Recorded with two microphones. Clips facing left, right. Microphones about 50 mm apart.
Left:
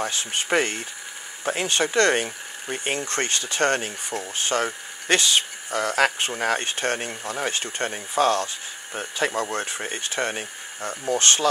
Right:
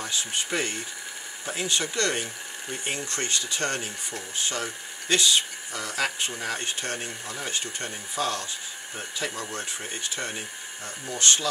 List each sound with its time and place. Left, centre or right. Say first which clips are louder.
0.0 s speech: left 4 dB; left